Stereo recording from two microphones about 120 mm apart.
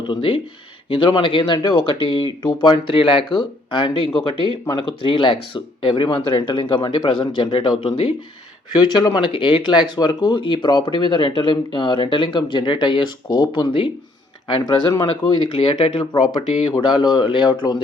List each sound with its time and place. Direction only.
0.1 s speech: 45° left (ahead or behind)
16.7 s speech: 40° left (ahead or behind)